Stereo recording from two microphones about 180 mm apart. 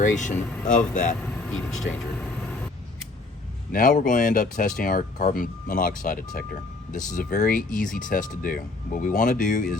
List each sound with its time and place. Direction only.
0.0 s speech: 45° left (ahead or behind)
1.2 s speech: 5° left (ahead or behind)
3.7 s speech: 50° left (ahead or behind)